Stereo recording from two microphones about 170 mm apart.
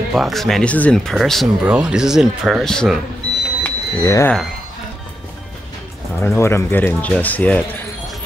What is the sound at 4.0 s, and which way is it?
Speech, 20° left (ahead or behind).